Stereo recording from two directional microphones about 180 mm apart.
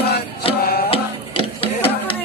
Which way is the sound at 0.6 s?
55° left (ahead or behind).